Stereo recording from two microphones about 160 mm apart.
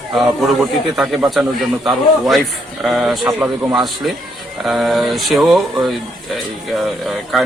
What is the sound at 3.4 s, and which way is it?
Speech, 20° right (ahead or behind).